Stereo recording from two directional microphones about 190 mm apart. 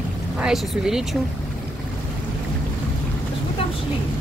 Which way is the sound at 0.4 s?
Centre (ahead or behind).